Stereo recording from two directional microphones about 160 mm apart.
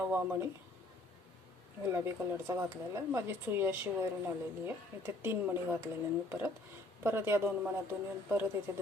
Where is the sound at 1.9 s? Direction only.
15° right (ahead or behind).